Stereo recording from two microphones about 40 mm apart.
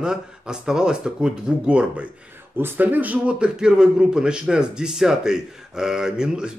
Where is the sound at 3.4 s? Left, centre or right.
Right.